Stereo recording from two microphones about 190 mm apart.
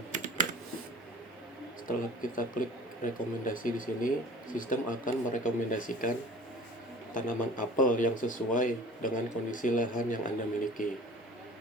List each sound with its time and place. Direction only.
1.9 s speech: 45° left (ahead or behind)
7.1 s speech: 45° left (ahead or behind)